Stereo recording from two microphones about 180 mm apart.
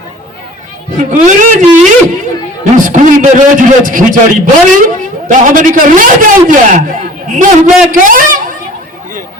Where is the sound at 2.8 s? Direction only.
45° right (ahead or behind).